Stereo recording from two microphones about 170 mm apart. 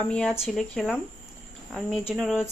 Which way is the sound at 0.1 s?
5° left (ahead or behind).